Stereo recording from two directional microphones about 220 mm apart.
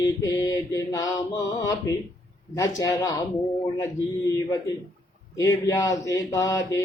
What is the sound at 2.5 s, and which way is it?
Speech, 15° left (ahead or behind).